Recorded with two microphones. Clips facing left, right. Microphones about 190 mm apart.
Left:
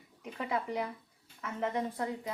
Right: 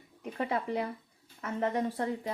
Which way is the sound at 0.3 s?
35° right (ahead or behind).